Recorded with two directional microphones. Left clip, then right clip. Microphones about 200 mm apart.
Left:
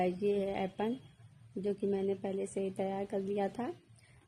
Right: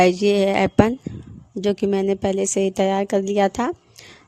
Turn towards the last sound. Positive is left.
turn(degrees=-50)  # may be behind; listen again after turning